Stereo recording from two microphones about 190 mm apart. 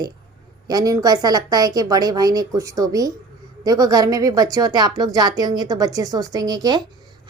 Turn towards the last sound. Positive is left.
turn(degrees=-20)  # may be behind; listen again after turning